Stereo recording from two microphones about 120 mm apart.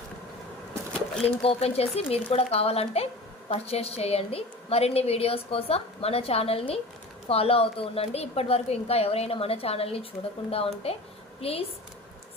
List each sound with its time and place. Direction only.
1.2 s a woman's voice: 55° left (ahead or behind)